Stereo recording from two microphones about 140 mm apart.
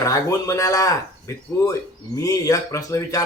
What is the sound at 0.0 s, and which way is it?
Speech, 20° left (ahead or behind).